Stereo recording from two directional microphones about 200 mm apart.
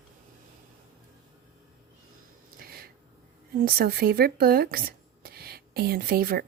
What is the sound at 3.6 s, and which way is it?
Speech, 50° right (ahead or behind).